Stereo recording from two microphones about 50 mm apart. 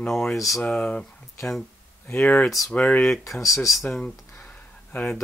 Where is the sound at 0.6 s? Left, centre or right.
Left.